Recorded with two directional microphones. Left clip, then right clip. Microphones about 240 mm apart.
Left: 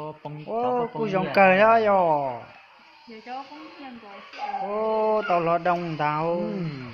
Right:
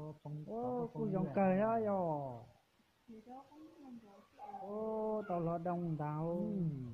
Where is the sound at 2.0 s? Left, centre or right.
Left.